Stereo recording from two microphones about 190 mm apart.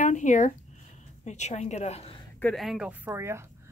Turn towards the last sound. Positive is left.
turn(degrees=-15)  # may be behind; listen again after turning